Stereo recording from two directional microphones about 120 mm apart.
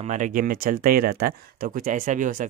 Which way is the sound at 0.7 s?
90° right.